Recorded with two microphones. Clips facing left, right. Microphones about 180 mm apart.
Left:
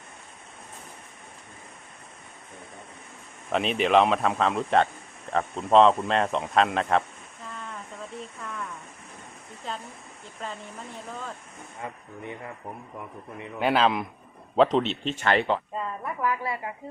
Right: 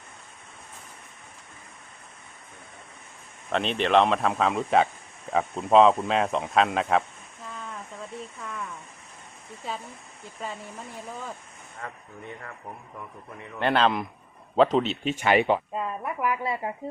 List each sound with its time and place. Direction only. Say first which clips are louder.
3.5 s a man's voice: left 1 dB; 5° left (ahead or behind)
7.4 s a sound: right 1 dB; centre (ahead or behind)
8.4 s rain: left 1 dB; centre (ahead or behind)
9.6 s a man's voice: right 1 dB; 5° right (ahead or behind)
11.8 s speech: left 2 dB; 15° left (ahead or behind)
13.6 s a man's voice: even; 5° left (ahead or behind); by 16.7 s 25° right (ahead or behind)